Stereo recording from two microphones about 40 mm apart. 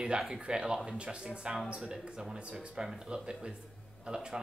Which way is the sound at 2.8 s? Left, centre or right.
Centre.